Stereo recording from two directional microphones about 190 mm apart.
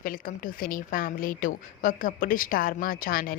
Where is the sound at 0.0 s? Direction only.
45° left (ahead or behind).